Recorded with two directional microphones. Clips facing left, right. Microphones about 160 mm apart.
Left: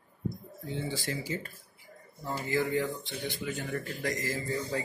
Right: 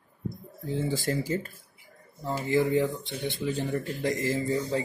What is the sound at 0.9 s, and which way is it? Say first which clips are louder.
Speech: right 6 dB; 50° right (ahead or behind).